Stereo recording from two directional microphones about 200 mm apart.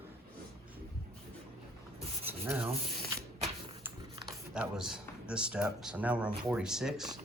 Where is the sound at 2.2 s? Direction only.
10° right (ahead or behind).